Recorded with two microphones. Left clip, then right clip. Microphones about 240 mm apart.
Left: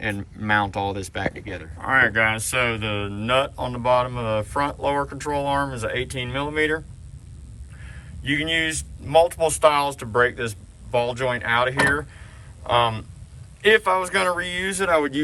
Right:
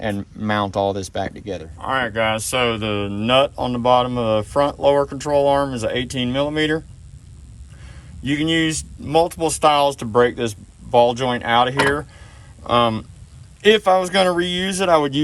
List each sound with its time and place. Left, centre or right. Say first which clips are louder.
0.0 s speech: right 3 dB; centre
8.2 s speech: right 3 dB; centre
13.6 s speech: right 3 dB; centre